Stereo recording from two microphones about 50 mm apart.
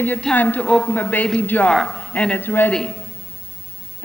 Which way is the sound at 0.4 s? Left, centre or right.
Left.